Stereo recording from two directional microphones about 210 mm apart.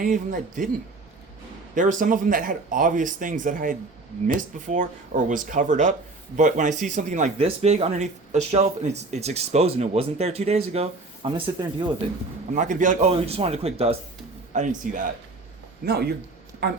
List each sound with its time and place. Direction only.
0.0 s speech: 40° right (ahead or behind)
1.7 s speech: 35° right (ahead or behind)
12.5 s speech: 35° right (ahead or behind)
15.9 s a man's voice: 50° right (ahead or behind)